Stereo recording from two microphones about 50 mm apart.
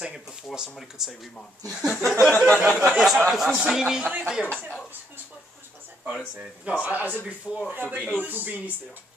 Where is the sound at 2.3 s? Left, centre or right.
Left.